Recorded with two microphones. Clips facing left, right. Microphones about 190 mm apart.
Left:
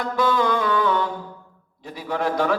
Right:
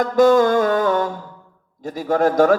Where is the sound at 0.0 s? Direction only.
45° right (ahead or behind).